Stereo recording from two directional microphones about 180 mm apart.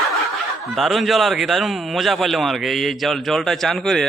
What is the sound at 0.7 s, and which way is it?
A man's voice, centre (ahead or behind).